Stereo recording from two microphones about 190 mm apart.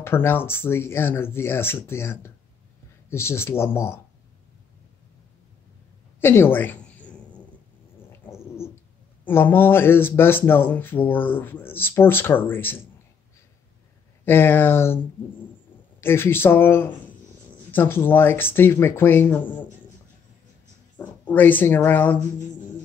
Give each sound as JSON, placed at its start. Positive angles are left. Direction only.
{"t": 0.0, "sound": "speech", "side_deg": 10}
{"t": 6.2, "sound": "a sound", "side_deg": 10}
{"t": 9.2, "sound": "speech", "side_deg": 10}
{"t": 14.2, "sound": "speech", "side_deg": 10}
{"t": 16.0, "sound": "speech", "side_deg": 10}
{"t": 21.0, "sound": "speech", "side_deg": 10}